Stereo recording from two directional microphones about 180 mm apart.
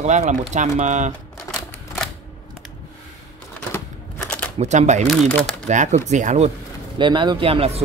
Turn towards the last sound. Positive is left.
turn(degrees=-35)  # may be behind; listen again after turning